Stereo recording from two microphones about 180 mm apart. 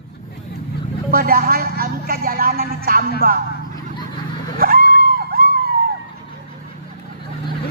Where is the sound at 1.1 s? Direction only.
55° right (ahead or behind).